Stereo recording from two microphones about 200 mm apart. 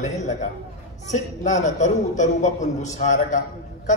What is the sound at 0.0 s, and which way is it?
A man's voice, 35° left (ahead or behind).